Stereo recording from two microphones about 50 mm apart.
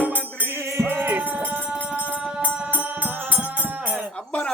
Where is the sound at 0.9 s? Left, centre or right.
Right.